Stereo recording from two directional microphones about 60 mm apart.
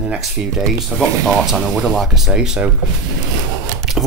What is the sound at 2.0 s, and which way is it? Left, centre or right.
Speech, centre.